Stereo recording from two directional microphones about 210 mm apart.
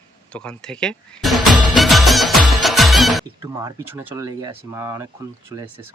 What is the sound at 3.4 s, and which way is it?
Speech, 15° right (ahead or behind).